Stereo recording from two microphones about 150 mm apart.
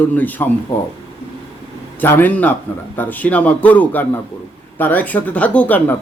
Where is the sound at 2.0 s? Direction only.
10° left (ahead or behind).